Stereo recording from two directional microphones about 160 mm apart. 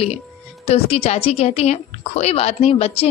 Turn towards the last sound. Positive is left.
turn(degrees=40)  # may be behind; listen again after turning